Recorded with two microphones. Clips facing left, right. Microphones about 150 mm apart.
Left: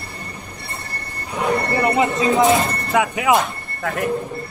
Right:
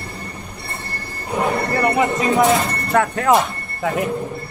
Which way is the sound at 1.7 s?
20° left (ahead or behind).